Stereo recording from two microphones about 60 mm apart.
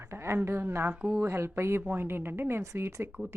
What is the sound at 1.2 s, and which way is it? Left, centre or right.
A woman's voice, right.